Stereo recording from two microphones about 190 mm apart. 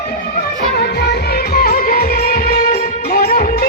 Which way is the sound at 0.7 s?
60° left (ahead or behind).